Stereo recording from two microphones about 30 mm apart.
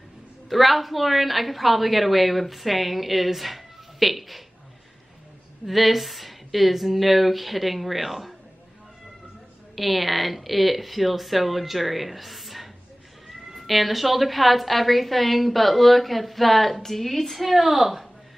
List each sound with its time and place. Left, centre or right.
0.5 s a woman's voice: centre
5.7 s a woman's voice: centre
9.8 s a woman's voice: centre